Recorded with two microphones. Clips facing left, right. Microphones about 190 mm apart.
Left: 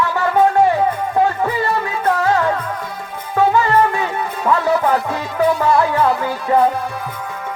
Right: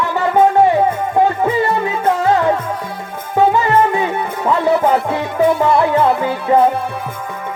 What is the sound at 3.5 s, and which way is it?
Music, 20° right (ahead or behind).